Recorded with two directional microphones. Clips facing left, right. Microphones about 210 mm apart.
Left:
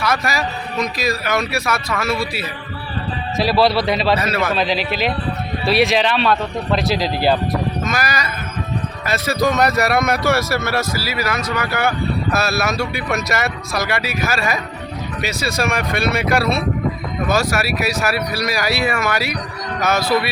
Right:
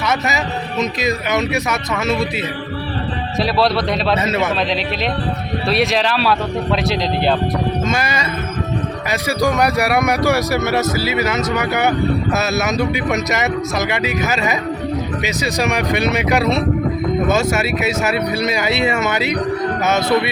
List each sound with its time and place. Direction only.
0.0 s speech: 20° right (ahead or behind)
3.4 s a man's voice: centre (ahead or behind)
4.2 s speech: 20° right (ahead or behind)
4.5 s a man's voice: centre (ahead or behind)
7.9 s speech: 25° right (ahead or behind)
9.0 s speech: 15° right (ahead or behind)